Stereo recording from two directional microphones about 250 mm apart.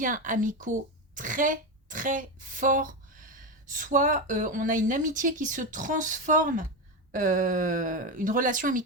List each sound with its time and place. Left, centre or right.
0.0 s speech: right